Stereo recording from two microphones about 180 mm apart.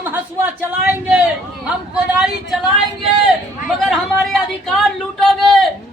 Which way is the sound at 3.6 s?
Centre (ahead or behind).